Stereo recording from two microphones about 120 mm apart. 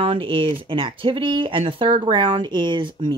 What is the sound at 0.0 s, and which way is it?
Speech, 50° right (ahead or behind).